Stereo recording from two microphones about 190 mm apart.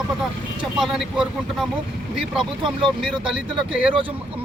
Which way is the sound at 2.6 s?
25° right (ahead or behind).